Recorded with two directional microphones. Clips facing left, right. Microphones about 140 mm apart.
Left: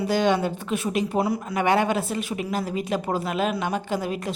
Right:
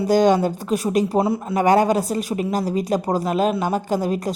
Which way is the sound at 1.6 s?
40° right (ahead or behind).